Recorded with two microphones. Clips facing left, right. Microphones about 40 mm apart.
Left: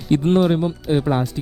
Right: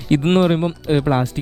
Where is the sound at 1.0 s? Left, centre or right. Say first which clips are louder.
Right 2 dB; right.